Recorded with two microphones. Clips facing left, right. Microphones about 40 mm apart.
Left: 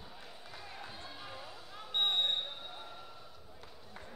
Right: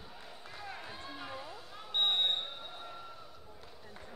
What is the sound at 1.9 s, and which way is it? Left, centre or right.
Basketball bounce, right.